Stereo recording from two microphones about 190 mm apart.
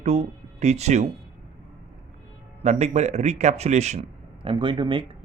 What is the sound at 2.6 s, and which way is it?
Speech, 35° right (ahead or behind).